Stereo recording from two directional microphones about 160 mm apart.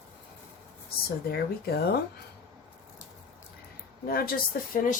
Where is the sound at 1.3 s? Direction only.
75° left (ahead or behind).